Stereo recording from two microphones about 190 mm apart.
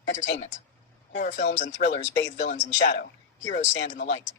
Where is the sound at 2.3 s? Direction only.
40° left (ahead or behind).